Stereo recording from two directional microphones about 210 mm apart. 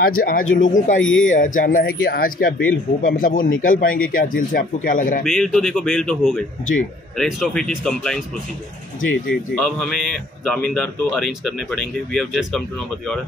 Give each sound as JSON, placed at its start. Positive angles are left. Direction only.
{"t": 0.0, "sound": "speech", "side_deg": 45}
{"t": 1.0, "sound": "speech", "side_deg": 70}
{"t": 1.3, "sound": "speech", "side_deg": 40}
{"t": 5.2, "sound": "speech", "side_deg": 0}
{"t": 9.3, "sound": "speech", "side_deg": 5}